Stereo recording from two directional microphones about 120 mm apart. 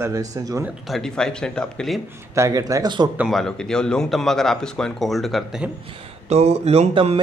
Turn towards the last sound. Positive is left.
turn(degrees=-60)  # may be behind; listen again after turning